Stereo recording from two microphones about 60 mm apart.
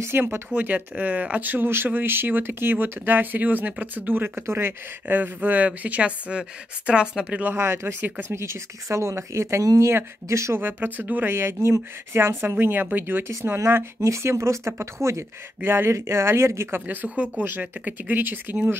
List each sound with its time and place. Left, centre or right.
0.0 s speech: right
0.6 s speech: right
5.0 s a woman's voice: right
7.5 s speech: right
8.4 s speech: right
10.6 s speech: right
11.3 s speech: right
14.0 s speech: right
16.8 s speech: right